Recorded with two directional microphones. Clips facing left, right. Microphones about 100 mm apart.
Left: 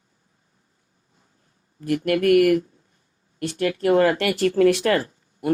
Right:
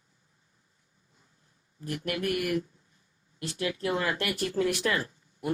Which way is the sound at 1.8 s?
80° left.